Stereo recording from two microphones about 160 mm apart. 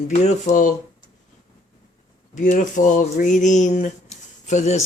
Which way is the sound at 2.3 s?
50° left (ahead or behind).